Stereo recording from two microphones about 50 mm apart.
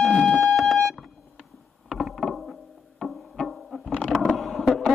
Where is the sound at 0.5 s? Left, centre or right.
Centre.